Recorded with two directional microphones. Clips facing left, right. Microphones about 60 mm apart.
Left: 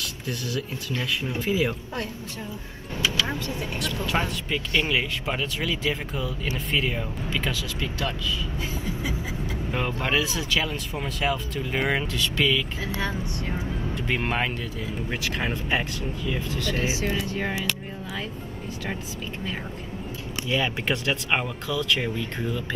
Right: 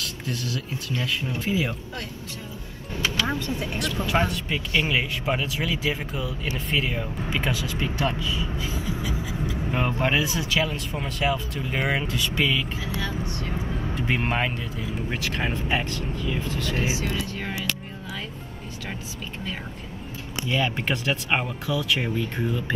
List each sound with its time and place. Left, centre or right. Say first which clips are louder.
0.0 s speech: right 1 dB; centre
3.0 s speech: right 1 dB; right
3.7 s speech: right 2 dB; centre
7.2 s speech: right 2 dB; centre
8.0 s speech: right 3 dB; right
9.7 s speech: right 2 dB; centre
13.0 s speech: left 1 dB; left
13.9 s speech: right 1 dB; centre
16.7 s speech: right 1 dB; right
17.1 s speech: left 2 dB; centre
20.4 s speech: even; centre